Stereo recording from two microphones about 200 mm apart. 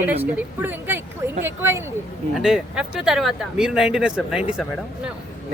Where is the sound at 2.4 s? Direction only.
Centre (ahead or behind).